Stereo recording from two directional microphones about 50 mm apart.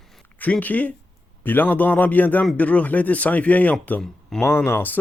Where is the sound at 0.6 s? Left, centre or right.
Left.